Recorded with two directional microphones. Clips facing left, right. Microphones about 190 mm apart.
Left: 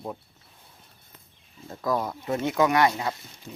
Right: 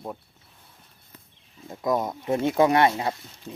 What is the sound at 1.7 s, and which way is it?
Speech, 20° right (ahead or behind).